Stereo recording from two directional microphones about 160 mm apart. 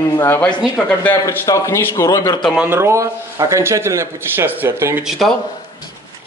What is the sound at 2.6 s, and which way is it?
A man's voice, 15° right (ahead or behind).